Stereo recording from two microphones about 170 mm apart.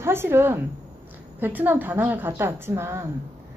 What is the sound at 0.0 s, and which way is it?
A woman's voice, 15° right (ahead or behind).